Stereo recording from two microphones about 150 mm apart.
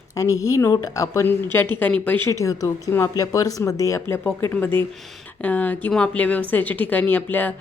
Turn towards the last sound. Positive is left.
turn(degrees=10)  # may be behind; listen again after turning